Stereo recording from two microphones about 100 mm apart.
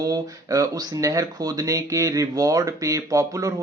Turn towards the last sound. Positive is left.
turn(degrees=-30)  # may be behind; listen again after turning